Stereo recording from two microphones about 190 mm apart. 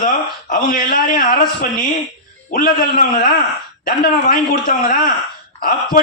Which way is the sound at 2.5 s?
50° left (ahead or behind).